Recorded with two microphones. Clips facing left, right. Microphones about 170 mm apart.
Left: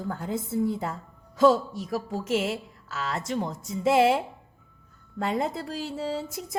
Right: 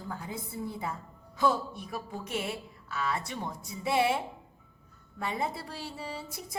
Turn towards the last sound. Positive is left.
turn(degrees=90)